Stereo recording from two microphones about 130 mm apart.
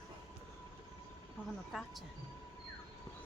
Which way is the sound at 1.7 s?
5° right (ahead or behind).